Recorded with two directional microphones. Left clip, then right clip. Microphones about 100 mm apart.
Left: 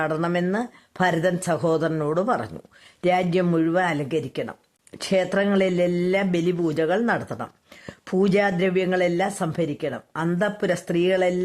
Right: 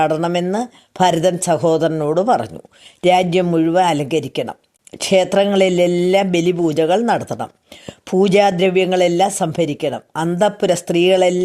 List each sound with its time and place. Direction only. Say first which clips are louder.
0.0 s speech: right 7 dB; 30° right (ahead or behind)